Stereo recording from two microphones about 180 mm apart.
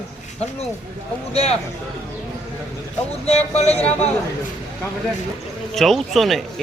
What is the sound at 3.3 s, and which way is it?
Speech, 35° left (ahead or behind).